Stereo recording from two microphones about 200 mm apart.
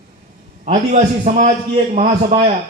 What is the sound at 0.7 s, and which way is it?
Speech, 35° right (ahead or behind).